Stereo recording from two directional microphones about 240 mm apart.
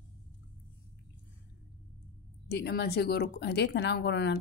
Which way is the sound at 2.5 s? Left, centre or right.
Left.